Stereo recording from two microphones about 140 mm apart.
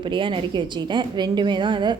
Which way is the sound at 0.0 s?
35° right (ahead or behind).